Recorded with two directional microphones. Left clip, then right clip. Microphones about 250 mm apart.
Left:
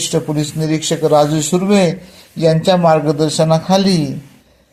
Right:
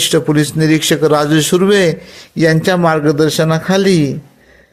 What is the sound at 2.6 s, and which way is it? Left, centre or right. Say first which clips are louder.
Speech: even; right.